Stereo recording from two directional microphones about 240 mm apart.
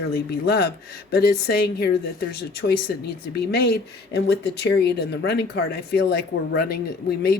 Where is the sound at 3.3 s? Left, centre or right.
Left.